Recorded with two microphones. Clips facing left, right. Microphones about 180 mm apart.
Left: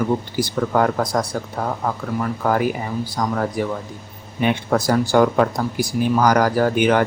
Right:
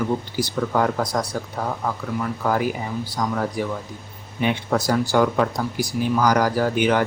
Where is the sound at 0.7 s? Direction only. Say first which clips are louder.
Left 3 dB; 50° left (ahead or behind).